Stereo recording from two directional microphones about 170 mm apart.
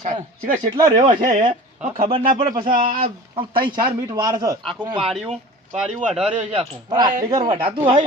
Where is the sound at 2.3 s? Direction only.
25° right (ahead or behind).